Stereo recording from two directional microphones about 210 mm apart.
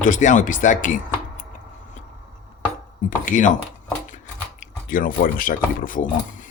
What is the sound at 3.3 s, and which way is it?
Chopping, 40° left (ahead or behind).